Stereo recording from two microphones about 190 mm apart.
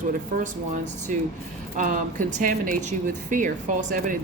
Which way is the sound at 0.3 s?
40° right (ahead or behind).